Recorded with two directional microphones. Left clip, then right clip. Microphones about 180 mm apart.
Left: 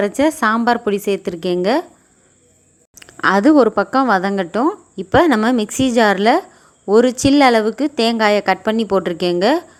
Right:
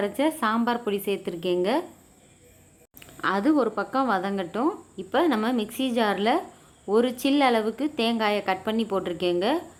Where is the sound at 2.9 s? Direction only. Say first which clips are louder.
Left 11 dB; 35° left (ahead or behind).